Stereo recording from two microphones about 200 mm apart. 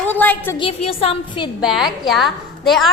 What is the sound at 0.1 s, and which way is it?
Speech, 10° left (ahead or behind).